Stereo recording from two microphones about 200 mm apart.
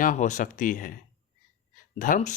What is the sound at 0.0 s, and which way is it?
Speech, 40° left (ahead or behind).